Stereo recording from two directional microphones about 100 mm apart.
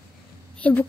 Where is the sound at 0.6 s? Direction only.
15° left (ahead or behind).